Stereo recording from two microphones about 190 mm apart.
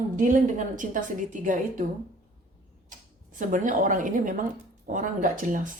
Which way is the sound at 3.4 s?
40° right (ahead or behind).